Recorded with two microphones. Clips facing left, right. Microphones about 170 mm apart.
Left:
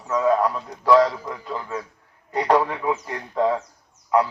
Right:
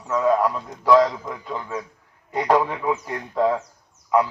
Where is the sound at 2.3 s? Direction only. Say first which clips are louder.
Even; 10° right (ahead or behind).